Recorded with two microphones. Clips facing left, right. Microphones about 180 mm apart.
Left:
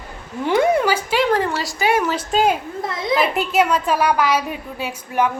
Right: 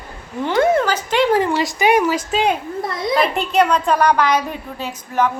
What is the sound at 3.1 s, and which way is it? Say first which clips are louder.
A child's voice: right 2 dB; 5° left (ahead or behind).